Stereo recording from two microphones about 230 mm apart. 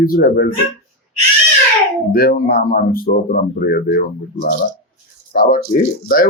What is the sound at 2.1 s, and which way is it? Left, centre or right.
Speech, left.